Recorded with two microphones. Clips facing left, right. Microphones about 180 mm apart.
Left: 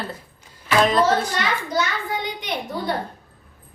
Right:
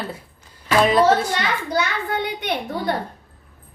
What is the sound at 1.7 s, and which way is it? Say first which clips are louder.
Speech: right 3 dB; 60° right (ahead or behind).